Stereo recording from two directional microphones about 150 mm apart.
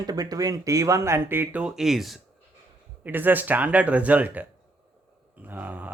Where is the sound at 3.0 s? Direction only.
15° right (ahead or behind).